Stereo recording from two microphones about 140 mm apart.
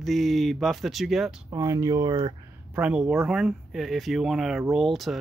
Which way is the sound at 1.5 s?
25° right (ahead or behind).